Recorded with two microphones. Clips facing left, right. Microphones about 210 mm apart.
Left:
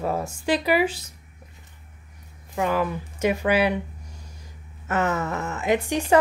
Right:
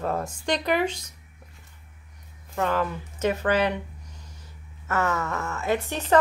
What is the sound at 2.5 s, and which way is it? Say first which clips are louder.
Speech: left 2 dB; 10° left (ahead or behind).